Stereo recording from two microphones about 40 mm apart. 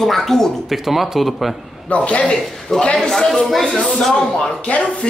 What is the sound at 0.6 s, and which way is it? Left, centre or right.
Speech, centre.